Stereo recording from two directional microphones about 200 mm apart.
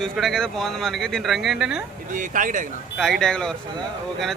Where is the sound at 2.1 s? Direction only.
40° right (ahead or behind).